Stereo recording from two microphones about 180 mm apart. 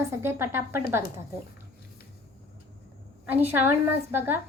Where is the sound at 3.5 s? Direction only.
10° right (ahead or behind).